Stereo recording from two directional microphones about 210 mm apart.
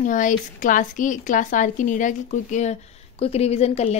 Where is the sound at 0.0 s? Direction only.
40° left (ahead or behind).